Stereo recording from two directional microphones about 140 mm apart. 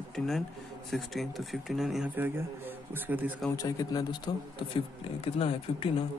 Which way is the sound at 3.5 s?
25° left (ahead or behind).